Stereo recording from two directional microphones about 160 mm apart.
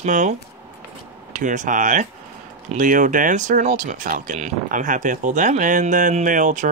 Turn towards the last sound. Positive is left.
turn(degrees=-50)  # may be behind; listen again after turning